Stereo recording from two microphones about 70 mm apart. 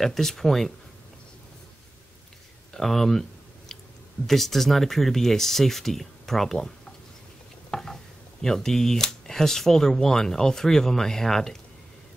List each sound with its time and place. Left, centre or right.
0.0 s speech: centre
2.7 s a sound: centre
4.3 s speech: centre
7.7 s speech: centre